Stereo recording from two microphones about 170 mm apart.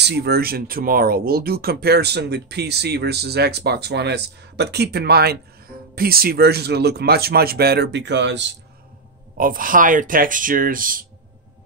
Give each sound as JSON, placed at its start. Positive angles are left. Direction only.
{"t": 0.0, "sound": "speech", "side_deg": -75}
{"t": 9.4, "sound": "speech", "side_deg": -55}